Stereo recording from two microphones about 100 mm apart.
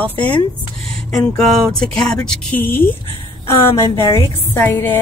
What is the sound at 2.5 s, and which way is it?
Speech, 20° left (ahead or behind).